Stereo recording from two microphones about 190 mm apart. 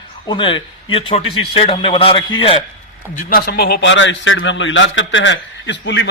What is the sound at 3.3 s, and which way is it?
A man's voice, 55° left (ahead or behind).